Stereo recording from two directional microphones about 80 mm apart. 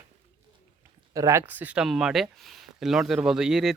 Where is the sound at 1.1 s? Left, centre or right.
Right.